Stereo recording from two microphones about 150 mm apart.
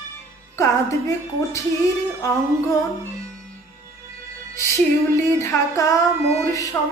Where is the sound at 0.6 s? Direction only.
20° left (ahead or behind).